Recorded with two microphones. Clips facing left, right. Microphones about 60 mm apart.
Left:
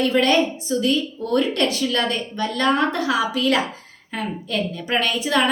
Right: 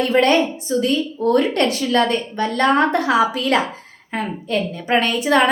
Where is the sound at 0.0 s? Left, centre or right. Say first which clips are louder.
Right 2 dB; right.